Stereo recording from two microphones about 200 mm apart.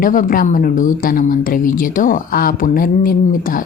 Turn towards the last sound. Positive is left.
turn(degrees=45)  # may be behind; listen again after turning